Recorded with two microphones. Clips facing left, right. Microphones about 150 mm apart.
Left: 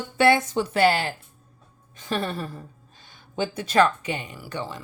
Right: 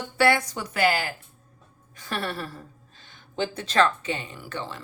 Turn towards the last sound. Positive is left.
turn(degrees=15)  # may be behind; listen again after turning